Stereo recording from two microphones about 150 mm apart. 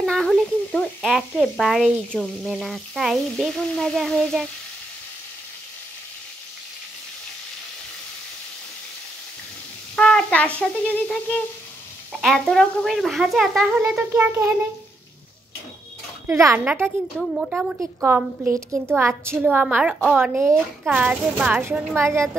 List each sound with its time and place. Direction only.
0.0 s speech: centre (ahead or behind)
9.9 s speech: 5° left (ahead or behind); by 14.7 s 10° right (ahead or behind)
16.3 s a woman's voice: 15° right (ahead or behind)
17.2 s a woman's voice: 5° right (ahead or behind)